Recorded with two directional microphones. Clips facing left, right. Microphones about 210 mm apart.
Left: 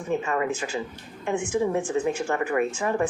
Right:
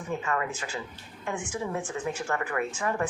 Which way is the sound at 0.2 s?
25° left (ahead or behind).